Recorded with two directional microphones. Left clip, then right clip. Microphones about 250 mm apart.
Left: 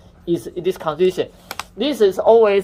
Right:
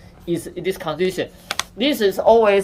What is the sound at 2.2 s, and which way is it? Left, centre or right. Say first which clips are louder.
Speech: even; left.